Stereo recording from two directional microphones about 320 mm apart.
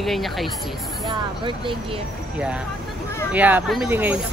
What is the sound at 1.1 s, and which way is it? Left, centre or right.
Speech, centre.